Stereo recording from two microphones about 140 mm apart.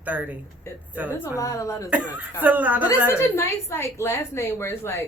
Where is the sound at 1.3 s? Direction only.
25° left (ahead or behind).